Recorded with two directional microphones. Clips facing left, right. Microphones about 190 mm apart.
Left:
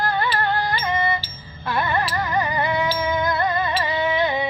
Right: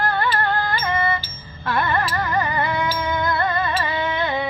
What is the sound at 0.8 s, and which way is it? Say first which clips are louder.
Music: even; 20° left (ahead or behind).